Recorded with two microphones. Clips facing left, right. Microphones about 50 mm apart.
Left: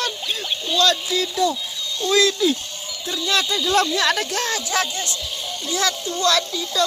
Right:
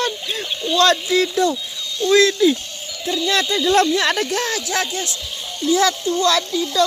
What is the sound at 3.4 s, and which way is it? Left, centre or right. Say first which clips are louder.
Speech: right 5 dB; right.